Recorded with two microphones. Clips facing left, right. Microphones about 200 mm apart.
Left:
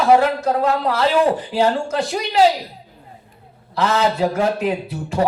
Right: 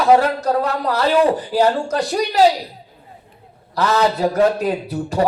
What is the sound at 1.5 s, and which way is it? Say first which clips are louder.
Speech: right 2 dB; 40° right (ahead or behind).